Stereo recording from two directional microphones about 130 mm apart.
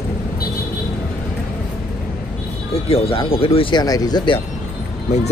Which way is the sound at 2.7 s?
50° left (ahead or behind).